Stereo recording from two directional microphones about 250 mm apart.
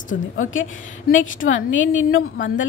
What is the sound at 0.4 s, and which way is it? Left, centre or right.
A woman's voice, left.